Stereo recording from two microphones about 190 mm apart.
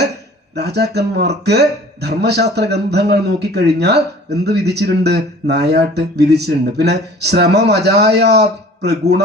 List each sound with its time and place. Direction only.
0.5 s speech: 60° right (ahead or behind)